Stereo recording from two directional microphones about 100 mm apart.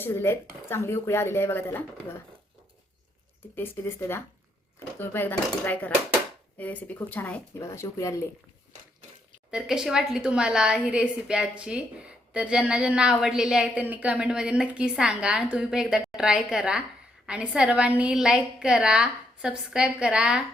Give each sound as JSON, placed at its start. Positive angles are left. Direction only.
{"t": 0.0, "sound": "a woman's voice", "side_deg": 20}
{"t": 3.5, "sound": "a woman's voice", "side_deg": 25}
{"t": 7.6, "sound": "speech", "side_deg": 30}
{"t": 9.5, "sound": "a woman's voice", "side_deg": -5}